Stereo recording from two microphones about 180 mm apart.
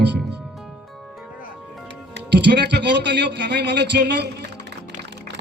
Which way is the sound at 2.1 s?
70° right (ahead or behind).